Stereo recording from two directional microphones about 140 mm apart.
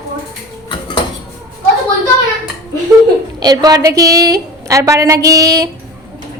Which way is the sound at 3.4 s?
30° right (ahead or behind).